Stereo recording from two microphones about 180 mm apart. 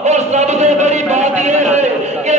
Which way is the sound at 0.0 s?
40° right (ahead or behind).